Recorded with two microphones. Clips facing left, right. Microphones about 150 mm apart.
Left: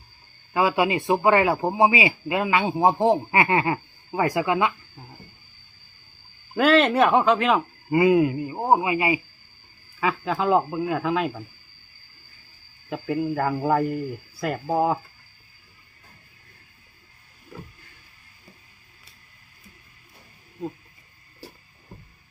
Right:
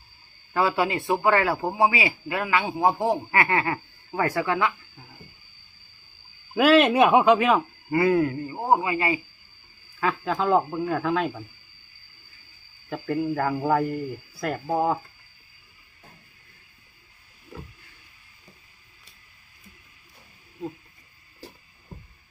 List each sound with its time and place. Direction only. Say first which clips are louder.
0.5 s a man's voice: left 2 dB; 15° left (ahead or behind)
6.5 s speech: right 1 dB; 5° right (ahead or behind)
7.9 s a man's voice: left 3 dB; 15° left (ahead or behind)
10.0 s a man's voice: left 1 dB; 5° left (ahead or behind)
12.9 s a man's voice: left 1 dB; 5° left (ahead or behind)